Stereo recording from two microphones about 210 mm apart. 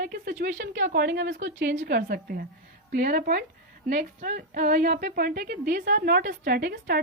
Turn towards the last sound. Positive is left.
turn(degrees=-45)  # may be behind; listen again after turning